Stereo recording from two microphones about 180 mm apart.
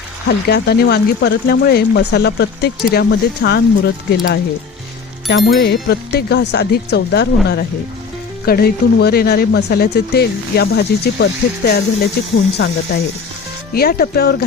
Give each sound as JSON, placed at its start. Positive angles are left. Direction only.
{"t": 0.3, "sound": "speech", "side_deg": 65}
{"t": 5.3, "sound": "speech", "side_deg": 70}
{"t": 13.7, "sound": "speech", "side_deg": 60}